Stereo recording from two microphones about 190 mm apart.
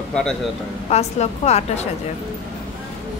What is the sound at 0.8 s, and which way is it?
A woman's voice, 35° left (ahead or behind).